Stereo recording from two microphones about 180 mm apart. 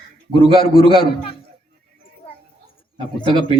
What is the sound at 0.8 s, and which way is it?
Speech, 30° left (ahead or behind).